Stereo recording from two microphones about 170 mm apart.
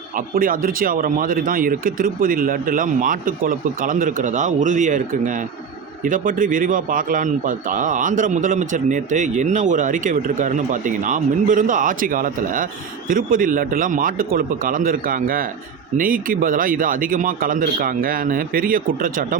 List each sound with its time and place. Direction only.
0.3 s speech: 55° right (ahead or behind)